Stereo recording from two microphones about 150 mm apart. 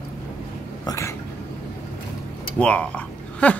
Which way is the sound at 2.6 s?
10° left (ahead or behind).